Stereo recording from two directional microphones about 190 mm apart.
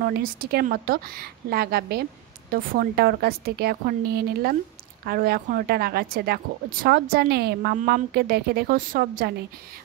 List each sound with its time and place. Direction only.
0.0 s a woman's voice: 50° right (ahead or behind)